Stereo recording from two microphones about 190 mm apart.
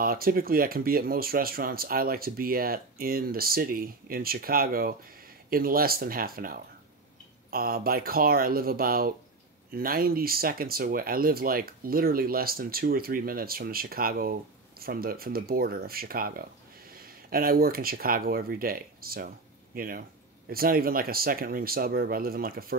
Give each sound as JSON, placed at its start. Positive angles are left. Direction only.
{"t": 0.0, "sound": "speech", "side_deg": -50}